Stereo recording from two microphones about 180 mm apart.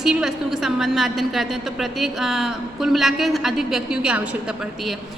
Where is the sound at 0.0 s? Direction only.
5° right (ahead or behind).